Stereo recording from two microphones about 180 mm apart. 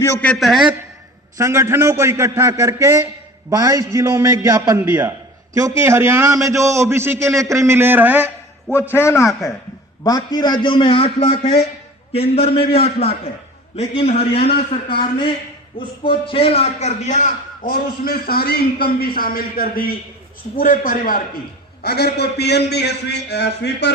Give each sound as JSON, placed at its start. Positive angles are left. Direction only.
{"t": 0.0, "sound": "a man's voice", "side_deg": 10}
{"t": 1.4, "sound": "a man's voice", "side_deg": -15}
{"t": 8.9, "sound": "a man's voice", "side_deg": 15}
{"t": 21.8, "sound": "a man's voice", "side_deg": 65}